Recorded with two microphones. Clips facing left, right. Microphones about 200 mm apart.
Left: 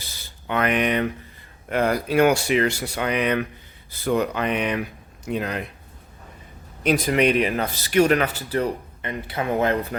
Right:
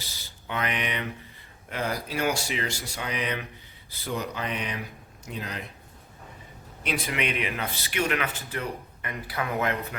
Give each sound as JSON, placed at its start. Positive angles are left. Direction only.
{"t": 0.0, "sound": "a sound", "side_deg": 55}
{"t": 1.7, "sound": "speech", "side_deg": 60}
{"t": 6.8, "sound": "speech", "side_deg": 40}